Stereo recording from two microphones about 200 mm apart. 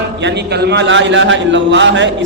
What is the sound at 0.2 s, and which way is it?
A man's voice, 55° right (ahead or behind).